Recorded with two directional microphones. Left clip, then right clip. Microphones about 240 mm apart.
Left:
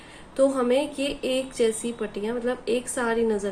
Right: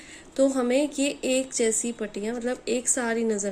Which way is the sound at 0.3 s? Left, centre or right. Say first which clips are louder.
Left 1 dB; right.